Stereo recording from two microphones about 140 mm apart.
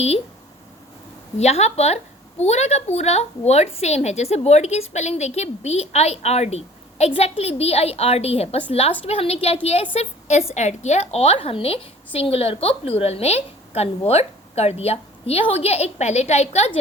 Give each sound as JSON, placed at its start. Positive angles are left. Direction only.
{"t": 1.4, "sound": "a woman's voice", "side_deg": 50}